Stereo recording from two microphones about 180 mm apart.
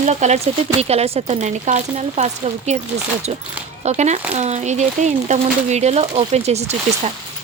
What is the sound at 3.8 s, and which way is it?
Speech, 40° right (ahead or behind).